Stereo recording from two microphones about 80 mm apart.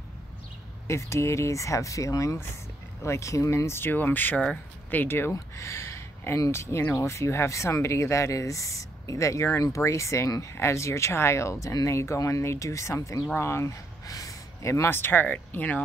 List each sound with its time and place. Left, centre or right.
0.8 s speech: left
14.0 s speech: left; by 15.8 s centre